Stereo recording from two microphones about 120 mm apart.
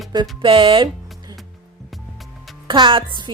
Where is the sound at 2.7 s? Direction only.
45° right (ahead or behind).